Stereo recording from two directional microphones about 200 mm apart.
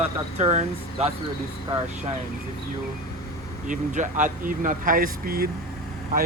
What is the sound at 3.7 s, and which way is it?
Speech, 40° right (ahead or behind).